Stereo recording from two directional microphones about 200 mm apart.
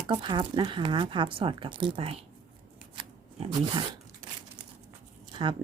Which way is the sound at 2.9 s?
25° right (ahead or behind).